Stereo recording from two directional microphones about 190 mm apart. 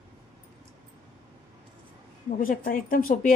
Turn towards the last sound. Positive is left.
turn(degrees=45)  # may be behind; listen again after turning